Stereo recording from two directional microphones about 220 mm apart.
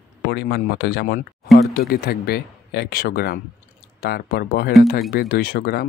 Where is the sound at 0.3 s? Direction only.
45° left (ahead or behind).